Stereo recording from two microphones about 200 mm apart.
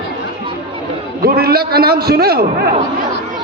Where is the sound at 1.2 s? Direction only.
50° right (ahead or behind).